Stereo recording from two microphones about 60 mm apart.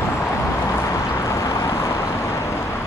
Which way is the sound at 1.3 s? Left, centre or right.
Left.